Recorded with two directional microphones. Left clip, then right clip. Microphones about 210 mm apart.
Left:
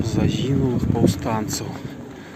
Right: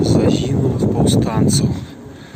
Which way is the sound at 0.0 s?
5° left (ahead or behind).